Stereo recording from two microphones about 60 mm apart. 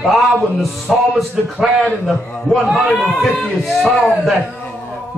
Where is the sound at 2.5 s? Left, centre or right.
Centre.